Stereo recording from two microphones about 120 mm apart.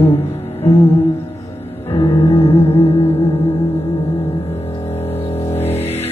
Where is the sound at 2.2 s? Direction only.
55° left (ahead or behind).